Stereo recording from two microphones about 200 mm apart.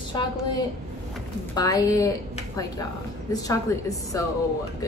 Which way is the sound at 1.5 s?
15° left (ahead or behind).